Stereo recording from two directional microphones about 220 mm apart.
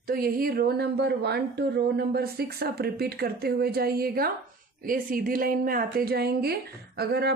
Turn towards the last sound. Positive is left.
turn(degrees=-45)  # may be behind; listen again after turning